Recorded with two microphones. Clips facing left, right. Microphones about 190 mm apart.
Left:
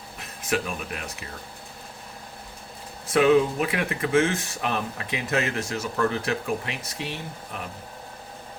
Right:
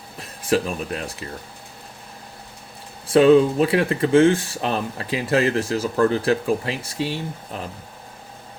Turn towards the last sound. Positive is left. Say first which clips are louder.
# right 5 dB
turn(degrees=-30)  # may be behind; listen again after turning